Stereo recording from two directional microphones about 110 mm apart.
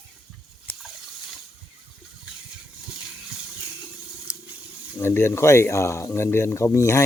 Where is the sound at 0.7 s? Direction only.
15° left (ahead or behind).